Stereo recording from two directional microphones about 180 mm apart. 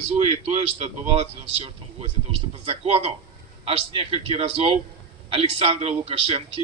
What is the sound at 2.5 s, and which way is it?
A man's voice, 30° right (ahead or behind).